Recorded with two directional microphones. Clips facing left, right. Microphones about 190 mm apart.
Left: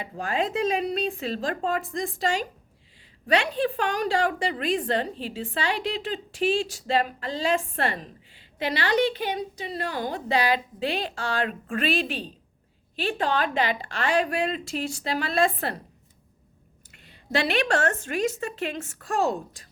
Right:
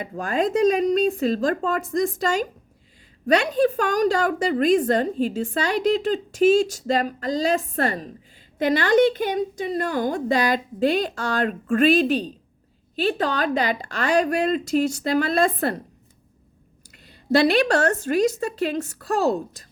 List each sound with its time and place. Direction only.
0.0 s a woman's voice: 45° right (ahead or behind)
16.9 s a woman's voice: 40° right (ahead or behind)